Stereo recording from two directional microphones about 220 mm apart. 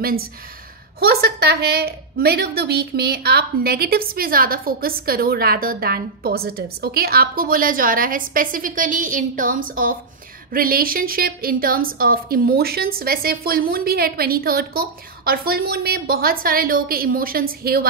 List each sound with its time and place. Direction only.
0.9 s a woman's voice: 45° right (ahead or behind)